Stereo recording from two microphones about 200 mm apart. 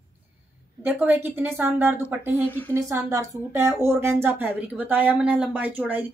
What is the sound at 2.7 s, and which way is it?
A woman's voice, 15° right (ahead or behind).